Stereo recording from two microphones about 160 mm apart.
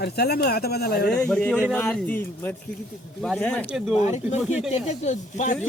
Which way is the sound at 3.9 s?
45° left (ahead or behind).